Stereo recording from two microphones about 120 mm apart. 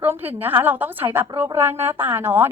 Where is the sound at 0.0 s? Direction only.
15° right (ahead or behind).